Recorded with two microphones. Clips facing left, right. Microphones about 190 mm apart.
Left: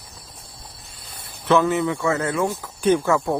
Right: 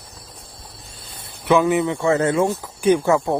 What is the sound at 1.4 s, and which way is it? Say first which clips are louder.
Speech: right 2 dB; 15° right (ahead or behind).